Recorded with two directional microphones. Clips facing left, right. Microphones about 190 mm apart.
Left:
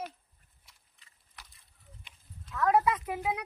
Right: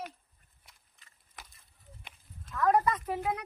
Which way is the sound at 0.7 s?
45° right (ahead or behind).